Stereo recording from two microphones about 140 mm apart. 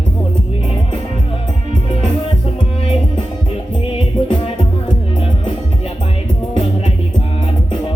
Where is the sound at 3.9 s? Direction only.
40° left (ahead or behind).